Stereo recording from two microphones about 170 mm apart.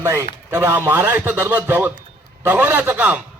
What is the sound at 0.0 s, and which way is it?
A man's voice, 15° right (ahead or behind).